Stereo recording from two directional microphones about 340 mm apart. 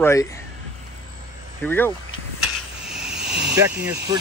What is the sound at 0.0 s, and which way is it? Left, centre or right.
Speech, centre.